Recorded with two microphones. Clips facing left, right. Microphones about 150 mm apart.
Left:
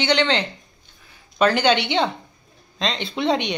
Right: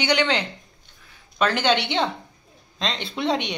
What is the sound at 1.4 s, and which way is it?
Speech, centre (ahead or behind).